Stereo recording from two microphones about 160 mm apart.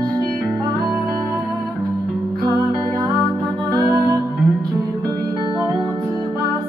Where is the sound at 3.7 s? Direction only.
20° right (ahead or behind).